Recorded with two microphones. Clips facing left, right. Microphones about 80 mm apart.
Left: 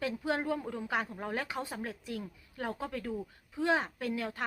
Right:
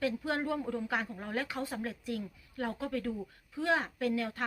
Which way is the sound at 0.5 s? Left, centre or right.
Centre.